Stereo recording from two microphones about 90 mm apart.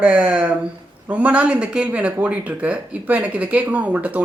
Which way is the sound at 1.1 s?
15° right (ahead or behind).